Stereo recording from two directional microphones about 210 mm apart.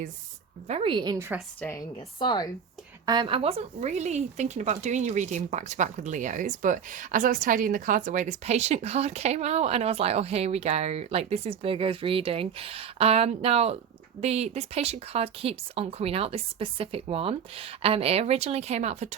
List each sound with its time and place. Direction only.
0.7 s speech: 25° right (ahead or behind)
1.6 s a woman's voice: 15° left (ahead or behind)
3.1 s speech: 25° right (ahead or behind)